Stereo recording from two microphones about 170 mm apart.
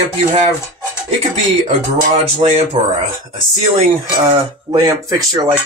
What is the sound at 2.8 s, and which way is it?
Speech, 35° right (ahead or behind).